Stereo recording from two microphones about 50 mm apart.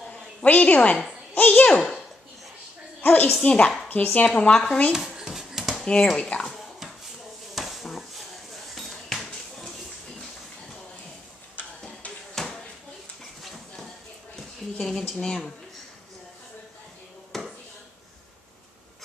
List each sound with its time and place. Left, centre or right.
0.4 s a child's voice: left
3.0 s a woman's voice: left
3.4 s speech: left
3.9 s speech: left
4.3 s speech: centre
4.9 s a sound: centre
6.1 s speech: centre
6.4 s a sound: centre
8.7 s dishes: centre
12.4 s a sound: centre
15.1 s speech: centre
17.3 s a sound: centre